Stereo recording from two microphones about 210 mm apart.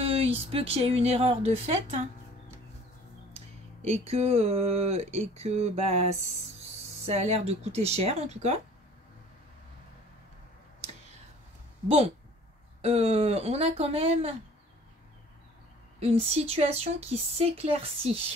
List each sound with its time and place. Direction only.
0.0 s speech: 30° right (ahead or behind)
3.3 s a woman's voice: 30° right (ahead or behind)
12.8 s speech: 30° right (ahead or behind)
16.0 s speech: 30° right (ahead or behind)